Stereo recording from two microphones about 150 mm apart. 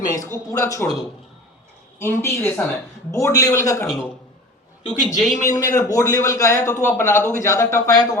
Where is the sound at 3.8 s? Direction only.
5° left (ahead or behind).